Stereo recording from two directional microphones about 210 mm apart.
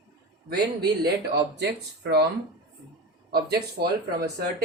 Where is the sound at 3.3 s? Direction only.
50° right (ahead or behind).